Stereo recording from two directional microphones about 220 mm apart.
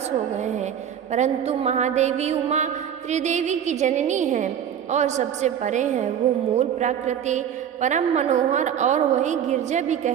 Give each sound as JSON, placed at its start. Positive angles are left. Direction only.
{"t": 0.3, "sound": "music", "side_deg": -30}
{"t": 1.1, "sound": "a woman's voice", "side_deg": -30}